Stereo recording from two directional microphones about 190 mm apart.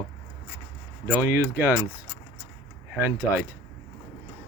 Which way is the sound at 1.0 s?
10° right (ahead or behind).